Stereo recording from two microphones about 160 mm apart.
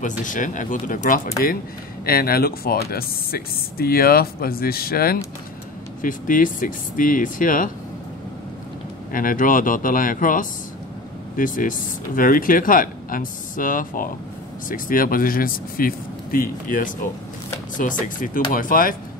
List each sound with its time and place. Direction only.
0.2 s speech: 55° left (ahead or behind)
2.0 s speech: 70° left (ahead or behind)
6.0 s speech: 55° left (ahead or behind)
9.1 s speech: 60° left (ahead or behind)
18.0 s speech: 60° left (ahead or behind)